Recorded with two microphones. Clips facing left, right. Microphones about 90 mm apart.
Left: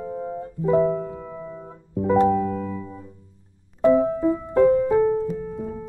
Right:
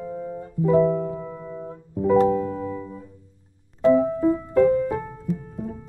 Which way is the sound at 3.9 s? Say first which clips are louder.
Even; 20° left (ahead or behind).